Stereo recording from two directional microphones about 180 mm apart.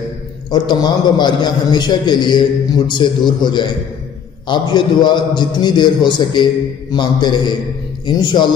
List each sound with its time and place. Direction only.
0.5 s a man's voice: 25° left (ahead or behind)